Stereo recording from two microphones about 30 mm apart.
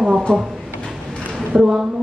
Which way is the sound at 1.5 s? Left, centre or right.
Right.